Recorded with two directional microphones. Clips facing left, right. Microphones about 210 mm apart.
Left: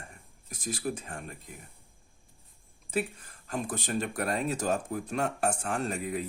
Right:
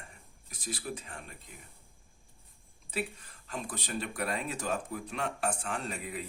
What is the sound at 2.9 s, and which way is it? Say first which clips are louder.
Speech: left 5 dB; 45° left (ahead or behind).